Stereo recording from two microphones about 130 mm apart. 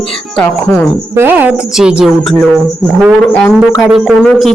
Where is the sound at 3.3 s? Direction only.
10° left (ahead or behind).